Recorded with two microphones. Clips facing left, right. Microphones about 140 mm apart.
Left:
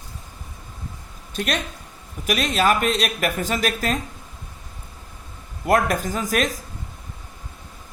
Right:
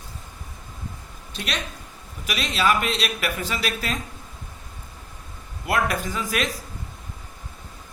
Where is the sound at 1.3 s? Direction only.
45° left (ahead or behind).